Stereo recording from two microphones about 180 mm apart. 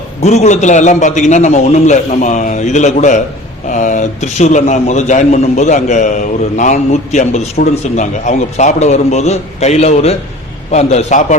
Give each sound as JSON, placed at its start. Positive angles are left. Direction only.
{"t": 0.2, "sound": "a man's voice", "side_deg": 40}